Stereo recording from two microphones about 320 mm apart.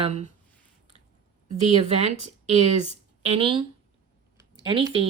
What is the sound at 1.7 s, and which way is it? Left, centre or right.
Speech, centre.